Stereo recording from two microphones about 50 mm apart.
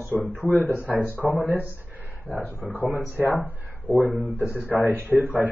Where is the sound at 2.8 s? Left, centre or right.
Right.